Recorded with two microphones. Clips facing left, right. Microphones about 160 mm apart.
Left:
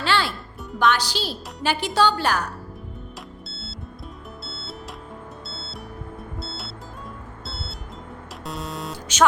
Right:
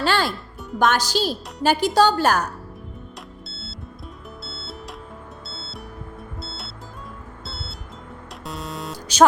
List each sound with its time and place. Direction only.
0.0 s music: 45° right (ahead or behind)
0.8 s a woman's voice: 45° right (ahead or behind)
3.5 s music: centre (ahead or behind)